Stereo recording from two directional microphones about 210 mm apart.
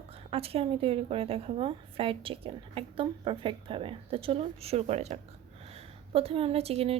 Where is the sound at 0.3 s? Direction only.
30° right (ahead or behind).